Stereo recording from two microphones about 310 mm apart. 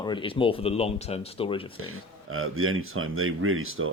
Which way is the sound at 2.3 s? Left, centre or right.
Right.